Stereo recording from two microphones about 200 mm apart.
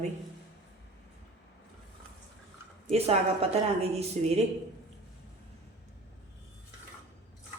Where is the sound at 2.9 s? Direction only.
30° right (ahead or behind).